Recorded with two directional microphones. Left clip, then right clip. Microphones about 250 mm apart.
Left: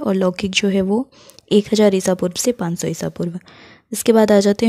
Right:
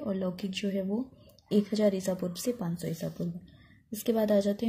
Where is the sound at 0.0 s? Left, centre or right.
Left.